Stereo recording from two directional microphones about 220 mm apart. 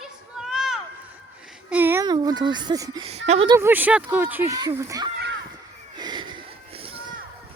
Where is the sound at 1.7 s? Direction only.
10° right (ahead or behind).